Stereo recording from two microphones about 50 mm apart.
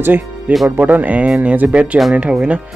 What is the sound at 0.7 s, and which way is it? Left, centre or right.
Speech, right.